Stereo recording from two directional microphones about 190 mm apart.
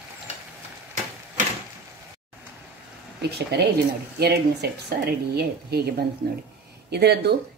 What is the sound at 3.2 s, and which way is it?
A woman's voice, 65° right (ahead or behind).